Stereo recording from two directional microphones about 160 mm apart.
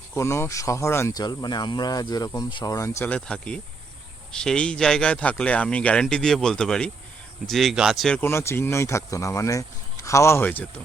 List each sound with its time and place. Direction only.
0.1 s speech: 15° left (ahead or behind)